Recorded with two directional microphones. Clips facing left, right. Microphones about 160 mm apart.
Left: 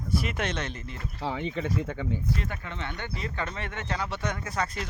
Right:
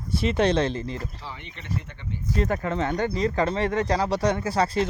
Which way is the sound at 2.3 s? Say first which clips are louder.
Right 8 dB; 40° right (ahead or behind).